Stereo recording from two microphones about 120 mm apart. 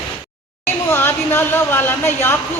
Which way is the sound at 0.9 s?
20° left (ahead or behind).